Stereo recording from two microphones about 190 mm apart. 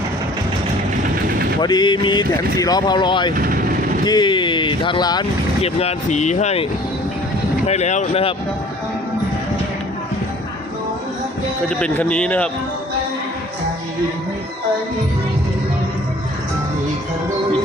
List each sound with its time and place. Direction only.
1.6 s speech: 25° left (ahead or behind)
5.6 s speech: 35° left (ahead or behind)
7.7 s speech: 35° left (ahead or behind)
11.8 s a man's voice: 5° left (ahead or behind)